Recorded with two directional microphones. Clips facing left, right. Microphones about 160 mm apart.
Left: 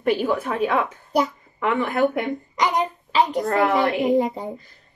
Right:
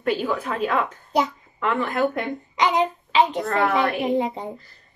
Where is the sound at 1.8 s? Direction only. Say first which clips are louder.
Left 3 dB; 10° left (ahead or behind).